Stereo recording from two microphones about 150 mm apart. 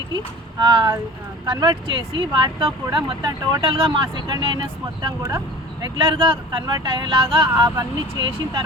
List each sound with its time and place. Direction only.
0.6 s speech: 30° right (ahead or behind)